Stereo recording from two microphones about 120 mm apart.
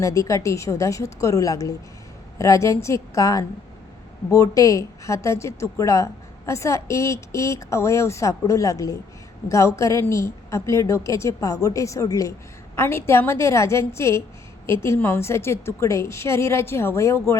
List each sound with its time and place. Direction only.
0.0 s a woman's voice: 25° left (ahead or behind)